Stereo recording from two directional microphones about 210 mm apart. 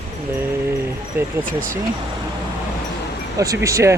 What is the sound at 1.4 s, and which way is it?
Speech, 40° right (ahead or behind).